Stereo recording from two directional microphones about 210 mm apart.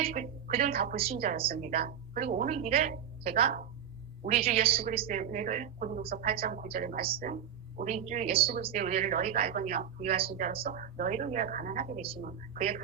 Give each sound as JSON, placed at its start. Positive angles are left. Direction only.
{"t": 0.0, "sound": "a woman's voice", "side_deg": -40}
{"t": 1.2, "sound": "a woman's voice", "side_deg": -35}
{"t": 4.7, "sound": "a woman's voice", "side_deg": -45}
{"t": 6.4, "sound": "a woman's voice", "side_deg": -45}
{"t": 7.8, "sound": "a woman's voice", "side_deg": -35}
{"t": 8.7, "sound": "a woman's voice", "side_deg": -40}
{"t": 11.9, "sound": "a woman's voice", "side_deg": -25}